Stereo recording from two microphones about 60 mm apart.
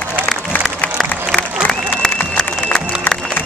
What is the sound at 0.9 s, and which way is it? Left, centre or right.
Applause, centre.